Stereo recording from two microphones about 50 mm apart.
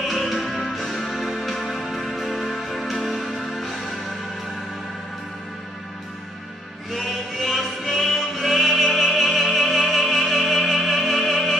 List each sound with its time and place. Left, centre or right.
0.1 s music: centre
6.9 s music: centre